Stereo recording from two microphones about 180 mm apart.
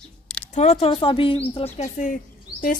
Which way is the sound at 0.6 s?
35° left (ahead or behind).